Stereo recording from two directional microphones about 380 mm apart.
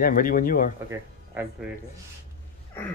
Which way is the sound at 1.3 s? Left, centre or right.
Centre.